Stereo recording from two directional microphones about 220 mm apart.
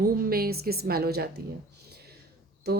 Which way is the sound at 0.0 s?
45° right (ahead or behind).